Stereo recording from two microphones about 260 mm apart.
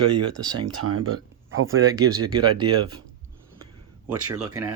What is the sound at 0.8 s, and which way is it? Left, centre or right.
Speech, right.